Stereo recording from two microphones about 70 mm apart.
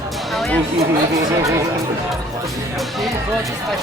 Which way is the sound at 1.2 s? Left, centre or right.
Right.